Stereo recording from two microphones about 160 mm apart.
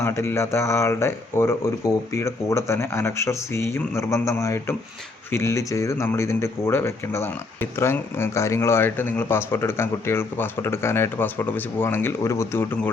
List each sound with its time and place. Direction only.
0.0 s speech: 15° left (ahead or behind)